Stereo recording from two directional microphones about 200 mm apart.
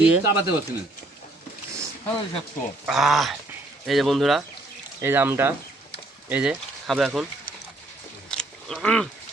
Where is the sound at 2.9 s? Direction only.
Centre (ahead or behind).